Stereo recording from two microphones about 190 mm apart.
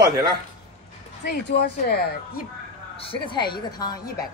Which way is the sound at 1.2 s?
55° left (ahead or behind).